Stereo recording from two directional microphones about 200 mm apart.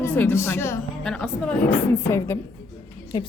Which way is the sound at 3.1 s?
20° left (ahead or behind).